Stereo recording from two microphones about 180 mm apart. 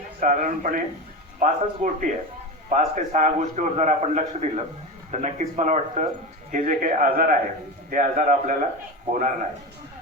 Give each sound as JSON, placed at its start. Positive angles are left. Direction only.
{"t": 0.2, "sound": "a man's voice", "side_deg": -45}